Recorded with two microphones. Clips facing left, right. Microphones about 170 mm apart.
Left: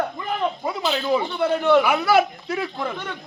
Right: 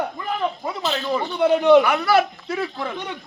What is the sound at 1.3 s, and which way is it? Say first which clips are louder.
Speech: right 6 dB; 15° right (ahead or behind).